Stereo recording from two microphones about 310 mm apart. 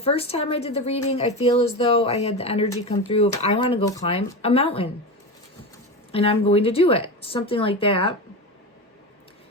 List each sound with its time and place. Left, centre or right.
0.0 s a woman's voice: centre
6.1 s speech: centre